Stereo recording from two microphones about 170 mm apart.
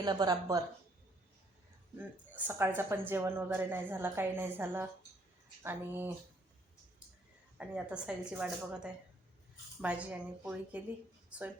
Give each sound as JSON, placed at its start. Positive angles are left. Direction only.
{"t": 0.0, "sound": "a woman's voice", "side_deg": -25}
{"t": 2.0, "sound": "speech", "side_deg": -10}
{"t": 7.6, "sound": "speech", "side_deg": -5}